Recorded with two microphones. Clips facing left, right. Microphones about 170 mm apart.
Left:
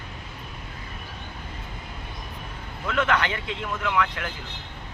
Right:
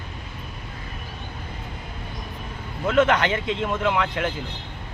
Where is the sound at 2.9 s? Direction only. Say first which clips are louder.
Right 5 dB; 25° right (ahead or behind).